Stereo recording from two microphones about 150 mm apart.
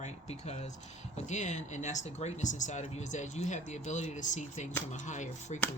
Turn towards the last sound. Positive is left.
turn(degrees=50)  # may be behind; listen again after turning